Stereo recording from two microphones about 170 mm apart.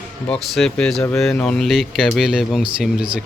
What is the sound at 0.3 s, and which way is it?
Speech, centre (ahead or behind).